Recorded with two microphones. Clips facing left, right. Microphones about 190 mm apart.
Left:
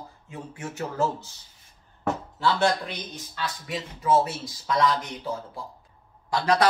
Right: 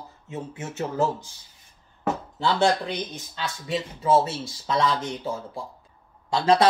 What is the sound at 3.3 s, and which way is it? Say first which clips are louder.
Speech: right 3 dB; 25° right (ahead or behind).